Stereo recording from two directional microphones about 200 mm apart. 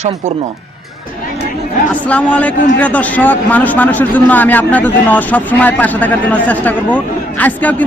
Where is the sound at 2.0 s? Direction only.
5° left (ahead or behind).